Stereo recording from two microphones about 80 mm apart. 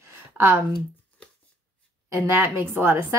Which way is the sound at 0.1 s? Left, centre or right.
Right.